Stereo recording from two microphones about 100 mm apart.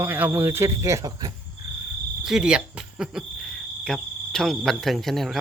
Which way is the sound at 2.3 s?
5° right (ahead or behind).